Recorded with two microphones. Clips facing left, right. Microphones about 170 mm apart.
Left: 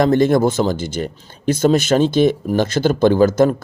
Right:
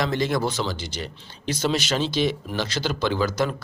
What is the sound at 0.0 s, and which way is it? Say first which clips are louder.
Speech: left 10 dB; 50° left (ahead or behind).